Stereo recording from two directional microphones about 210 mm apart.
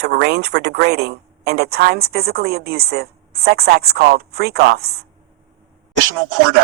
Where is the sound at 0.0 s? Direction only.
50° right (ahead or behind).